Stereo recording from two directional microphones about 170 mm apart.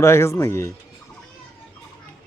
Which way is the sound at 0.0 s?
15° left (ahead or behind).